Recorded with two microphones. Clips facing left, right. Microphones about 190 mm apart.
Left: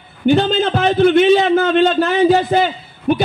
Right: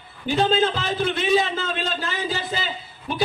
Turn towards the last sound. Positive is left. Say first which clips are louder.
# left 9 dB
turn(degrees=65)  # may be behind; listen again after turning